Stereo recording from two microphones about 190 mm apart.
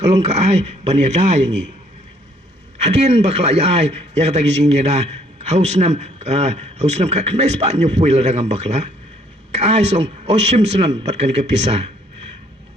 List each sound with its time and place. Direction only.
0.0 s a man's voice: 35° right (ahead or behind)
2.8 s a man's voice: 35° right (ahead or behind)